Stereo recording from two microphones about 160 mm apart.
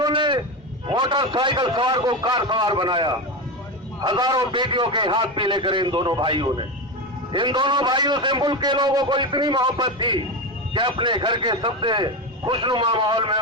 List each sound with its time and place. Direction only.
0.0 s a man's voice: 30° right (ahead or behind)